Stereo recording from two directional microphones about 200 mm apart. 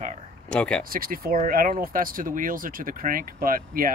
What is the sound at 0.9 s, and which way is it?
Speech, 45° right (ahead or behind).